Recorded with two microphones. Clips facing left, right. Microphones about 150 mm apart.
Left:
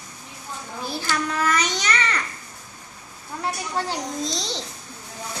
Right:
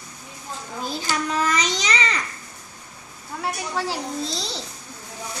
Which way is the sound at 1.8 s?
10° right (ahead or behind).